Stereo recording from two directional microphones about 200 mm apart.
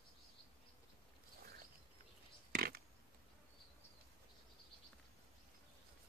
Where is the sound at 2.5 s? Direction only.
50° right (ahead or behind).